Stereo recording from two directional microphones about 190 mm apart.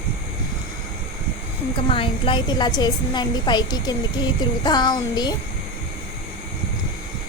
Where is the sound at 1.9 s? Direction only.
25° left (ahead or behind).